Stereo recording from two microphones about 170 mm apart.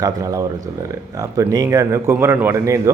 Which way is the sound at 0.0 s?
20° right (ahead or behind).